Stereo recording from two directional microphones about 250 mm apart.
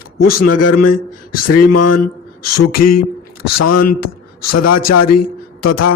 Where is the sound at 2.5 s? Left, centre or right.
Left.